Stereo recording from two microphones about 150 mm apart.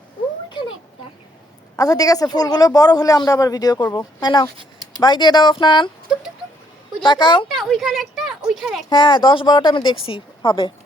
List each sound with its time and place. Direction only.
1.7 s a man's voice: 25° left (ahead or behind)
7.0 s a woman's voice: 30° left (ahead or behind)
7.4 s speech: centre (ahead or behind)
8.9 s a woman's voice: 30° left (ahead or behind)